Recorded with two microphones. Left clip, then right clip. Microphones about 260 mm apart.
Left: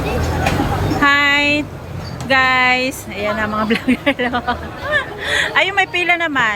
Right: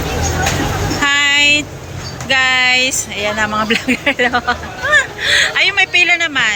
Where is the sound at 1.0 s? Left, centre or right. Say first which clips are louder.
Right 1 dB; centre.